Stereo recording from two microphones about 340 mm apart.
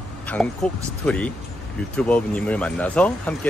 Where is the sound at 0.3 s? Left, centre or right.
Centre.